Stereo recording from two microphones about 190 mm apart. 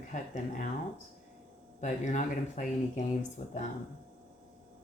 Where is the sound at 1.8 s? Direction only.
40° left (ahead or behind).